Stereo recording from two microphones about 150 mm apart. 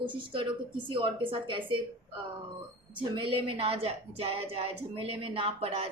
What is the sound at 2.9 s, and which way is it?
A woman's voice, 35° right (ahead or behind).